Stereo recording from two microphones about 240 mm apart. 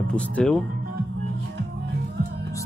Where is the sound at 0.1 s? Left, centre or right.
Centre.